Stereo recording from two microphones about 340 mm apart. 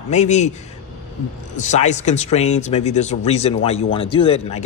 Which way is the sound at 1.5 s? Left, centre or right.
Left.